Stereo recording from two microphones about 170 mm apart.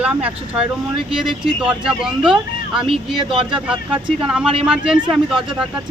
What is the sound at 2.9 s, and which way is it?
Speech, 30° right (ahead or behind).